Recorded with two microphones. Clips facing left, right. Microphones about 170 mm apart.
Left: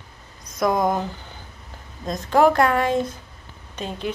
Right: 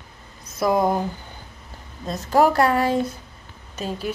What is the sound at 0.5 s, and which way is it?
Speech, 5° right (ahead or behind).